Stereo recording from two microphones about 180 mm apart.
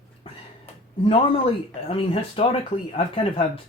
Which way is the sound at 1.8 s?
30° left (ahead or behind).